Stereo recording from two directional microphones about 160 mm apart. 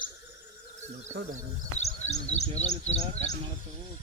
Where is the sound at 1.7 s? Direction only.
45° left (ahead or behind).